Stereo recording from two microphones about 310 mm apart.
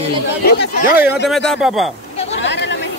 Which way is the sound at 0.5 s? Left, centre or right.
Left.